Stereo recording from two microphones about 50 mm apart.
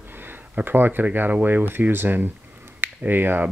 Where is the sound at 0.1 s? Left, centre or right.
Right.